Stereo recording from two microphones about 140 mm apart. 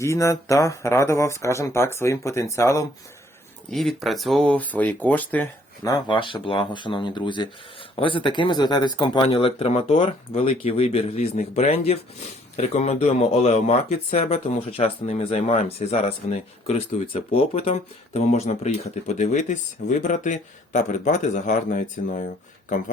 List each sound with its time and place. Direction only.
0.0 s speech: 20° left (ahead or behind)
3.7 s speech: centre (ahead or behind)
5.8 s speech: 30° left (ahead or behind); by 22.2 s 65° left (ahead or behind)